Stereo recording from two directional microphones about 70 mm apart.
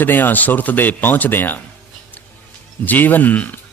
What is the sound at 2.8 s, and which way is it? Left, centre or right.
Speech, left.